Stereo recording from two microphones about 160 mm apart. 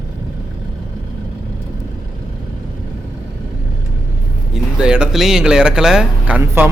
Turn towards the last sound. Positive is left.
turn(degrees=-10)  # may be behind; listen again after turning